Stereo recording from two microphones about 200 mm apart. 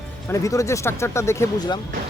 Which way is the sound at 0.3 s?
15° left (ahead or behind).